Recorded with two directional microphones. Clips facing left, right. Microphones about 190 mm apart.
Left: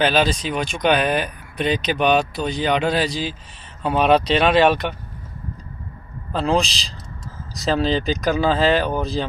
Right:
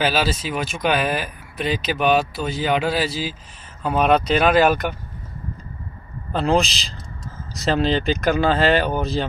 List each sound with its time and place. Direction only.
0.0 s speech: 5° right (ahead or behind)
6.3 s speech: centre (ahead or behind)